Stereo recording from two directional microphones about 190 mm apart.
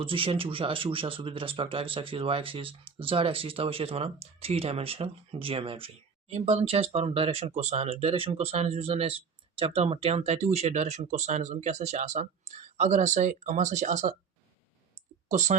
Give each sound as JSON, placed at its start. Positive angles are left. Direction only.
{"t": 0.0, "sound": "speech", "side_deg": -30}
{"t": 15.3, "sound": "speech", "side_deg": -40}